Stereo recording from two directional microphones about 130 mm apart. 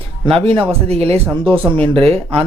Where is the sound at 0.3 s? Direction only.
45° right (ahead or behind).